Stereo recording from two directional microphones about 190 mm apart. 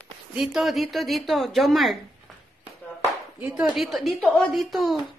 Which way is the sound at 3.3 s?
5° right (ahead or behind).